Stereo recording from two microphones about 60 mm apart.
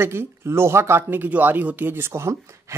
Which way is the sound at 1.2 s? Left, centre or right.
Right.